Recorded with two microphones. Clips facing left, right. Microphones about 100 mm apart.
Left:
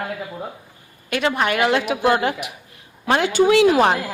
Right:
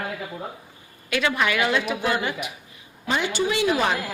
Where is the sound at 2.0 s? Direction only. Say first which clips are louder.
Left 6 dB; 55° left (ahead or behind); by 3.3 s 80° left.